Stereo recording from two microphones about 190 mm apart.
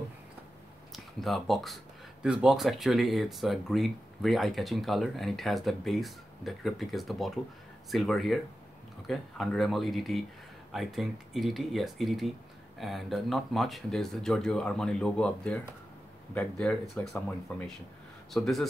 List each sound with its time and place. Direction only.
0.9 s speech: centre (ahead or behind)